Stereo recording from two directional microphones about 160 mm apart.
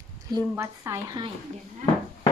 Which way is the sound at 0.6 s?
20° right (ahead or behind).